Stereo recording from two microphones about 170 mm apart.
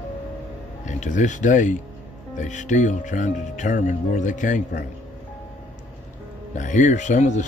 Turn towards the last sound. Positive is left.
turn(degrees=45)  # may be behind; listen again after turning